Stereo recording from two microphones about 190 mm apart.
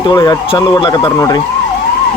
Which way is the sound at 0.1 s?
20° left (ahead or behind).